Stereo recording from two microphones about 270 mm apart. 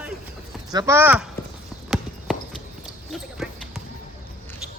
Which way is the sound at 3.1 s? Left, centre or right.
Centre.